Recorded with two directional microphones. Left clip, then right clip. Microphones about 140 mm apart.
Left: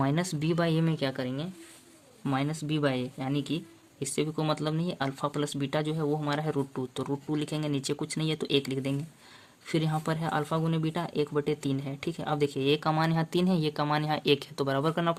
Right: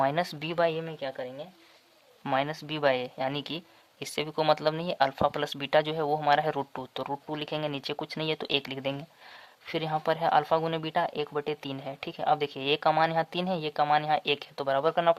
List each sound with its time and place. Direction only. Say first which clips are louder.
0.0 s speech: right 3 dB; 40° right (ahead or behind)
0.9 s speech: left 4 dB; 5° left (ahead or behind)
2.2 s speech: right 3 dB; 45° right (ahead or behind); by 15.1 s 30° right (ahead or behind)